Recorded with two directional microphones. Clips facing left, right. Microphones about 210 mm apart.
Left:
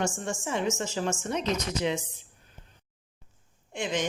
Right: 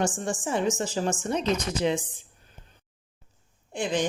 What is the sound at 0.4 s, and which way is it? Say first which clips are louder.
A woman's voice: right 3 dB; 35° right (ahead or behind).